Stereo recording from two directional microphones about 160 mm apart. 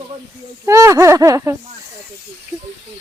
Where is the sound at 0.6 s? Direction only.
20° right (ahead or behind).